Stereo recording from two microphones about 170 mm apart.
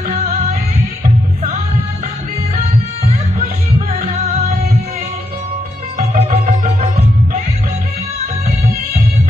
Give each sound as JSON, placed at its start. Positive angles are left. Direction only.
{"t": 5.9, "sound": "music", "side_deg": -40}